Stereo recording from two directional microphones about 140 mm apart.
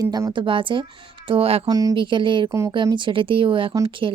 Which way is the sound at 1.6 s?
25° right (ahead or behind).